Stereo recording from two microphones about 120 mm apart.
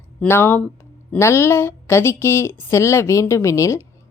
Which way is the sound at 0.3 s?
20° left (ahead or behind).